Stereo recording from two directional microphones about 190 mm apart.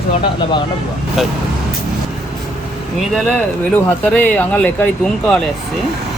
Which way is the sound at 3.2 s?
5° left (ahead or behind).